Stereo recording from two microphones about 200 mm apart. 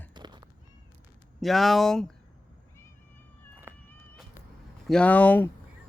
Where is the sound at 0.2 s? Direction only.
20° right (ahead or behind).